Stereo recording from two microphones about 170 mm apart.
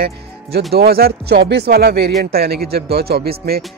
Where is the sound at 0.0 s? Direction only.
65° right (ahead or behind).